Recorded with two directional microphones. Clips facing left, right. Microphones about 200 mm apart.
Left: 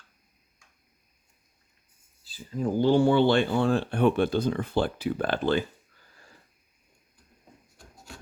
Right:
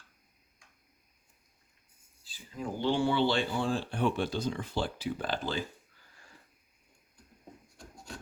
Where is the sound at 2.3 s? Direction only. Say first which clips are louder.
Left 10 dB; 40° left (ahead or behind); by 5.6 s 60° left (ahead or behind).